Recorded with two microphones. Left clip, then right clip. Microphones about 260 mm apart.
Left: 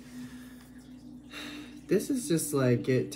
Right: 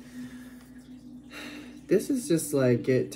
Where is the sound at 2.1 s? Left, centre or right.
Centre.